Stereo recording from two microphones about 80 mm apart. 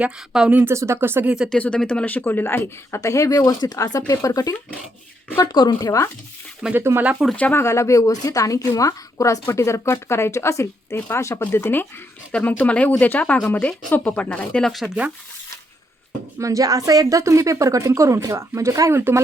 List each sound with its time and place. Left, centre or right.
0.0 s speech: centre
0.7 s speech: right
1.2 s speech: centre
1.5 s speech: centre
3.0 s a woman's voice: left
6.7 s speech: right
7.5 s a woman's voice: left; by 14.7 s centre
14.7 s speech: centre
16.4 s a woman's voice: right